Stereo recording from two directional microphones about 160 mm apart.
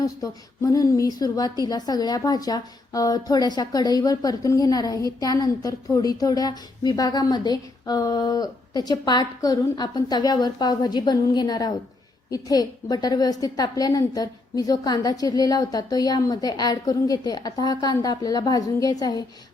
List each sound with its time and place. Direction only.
0.0 s a woman's voice: 20° left (ahead or behind)